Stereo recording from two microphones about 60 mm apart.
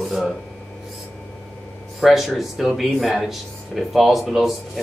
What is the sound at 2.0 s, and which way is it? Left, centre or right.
Speech, centre.